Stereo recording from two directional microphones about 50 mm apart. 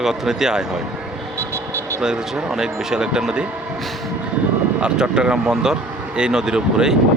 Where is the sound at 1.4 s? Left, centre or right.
Right.